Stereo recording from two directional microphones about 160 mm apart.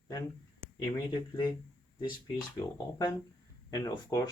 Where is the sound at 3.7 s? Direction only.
25° left (ahead or behind).